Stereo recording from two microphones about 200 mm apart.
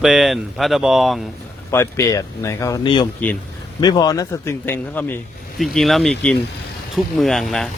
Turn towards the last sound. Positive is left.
turn(degrees=0)  # may be behind; listen again after turning